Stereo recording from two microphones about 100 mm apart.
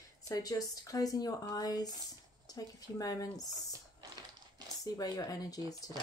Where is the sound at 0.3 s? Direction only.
35° left (ahead or behind).